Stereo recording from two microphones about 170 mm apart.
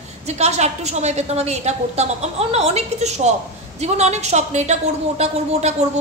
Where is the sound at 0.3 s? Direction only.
40° right (ahead or behind).